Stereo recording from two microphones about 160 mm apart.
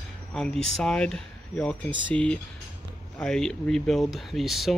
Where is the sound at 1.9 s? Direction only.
30° right (ahead or behind).